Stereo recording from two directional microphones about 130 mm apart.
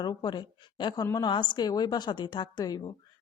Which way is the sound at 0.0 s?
35° left (ahead or behind).